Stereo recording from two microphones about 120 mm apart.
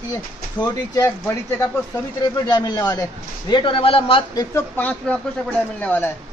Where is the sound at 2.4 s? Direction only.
35° left (ahead or behind); by 4.2 s 50° left (ahead or behind).